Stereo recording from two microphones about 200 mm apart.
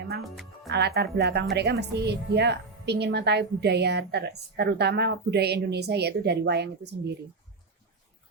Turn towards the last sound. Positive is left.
turn(degrees=-55)  # may be behind; listen again after turning